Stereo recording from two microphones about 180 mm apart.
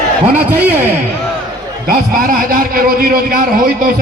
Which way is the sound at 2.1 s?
50° right (ahead or behind).